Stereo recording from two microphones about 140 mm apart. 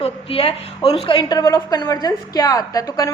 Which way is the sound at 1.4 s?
25° left (ahead or behind).